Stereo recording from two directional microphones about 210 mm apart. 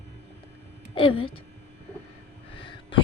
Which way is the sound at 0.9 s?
25° left (ahead or behind).